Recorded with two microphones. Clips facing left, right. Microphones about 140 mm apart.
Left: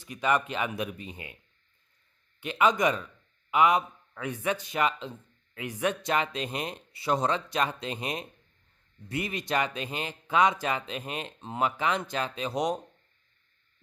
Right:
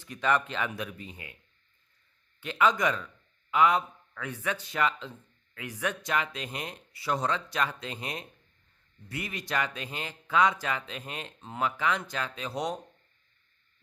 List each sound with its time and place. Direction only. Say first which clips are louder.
0.0 s a man's voice: left 1 dB; 10° left (ahead or behind)
2.4 s a man's voice: left 2 dB; 20° left (ahead or behind)